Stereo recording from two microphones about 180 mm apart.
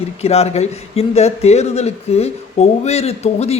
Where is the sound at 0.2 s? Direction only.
35° left (ahead or behind).